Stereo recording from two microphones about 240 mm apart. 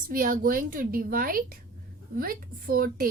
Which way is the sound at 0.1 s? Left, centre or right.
Right.